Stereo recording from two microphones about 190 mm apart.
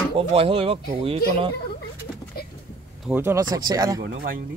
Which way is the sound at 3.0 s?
10° right (ahead or behind).